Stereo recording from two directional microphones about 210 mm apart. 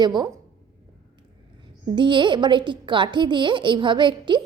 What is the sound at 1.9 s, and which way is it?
A woman's voice, 20° right (ahead or behind).